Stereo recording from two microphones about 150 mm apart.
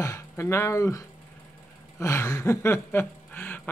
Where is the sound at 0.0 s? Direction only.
20° left (ahead or behind).